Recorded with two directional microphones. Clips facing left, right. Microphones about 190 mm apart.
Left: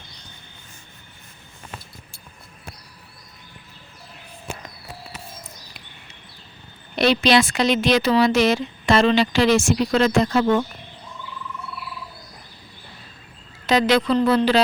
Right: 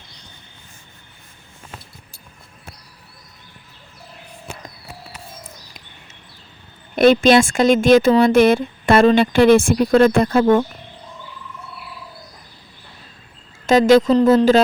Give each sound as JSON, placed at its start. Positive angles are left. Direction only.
{"t": 5.4, "sound": "bird", "side_deg": -40}
{"t": 6.9, "sound": "speech", "side_deg": -50}
{"t": 13.7, "sound": "speech", "side_deg": -45}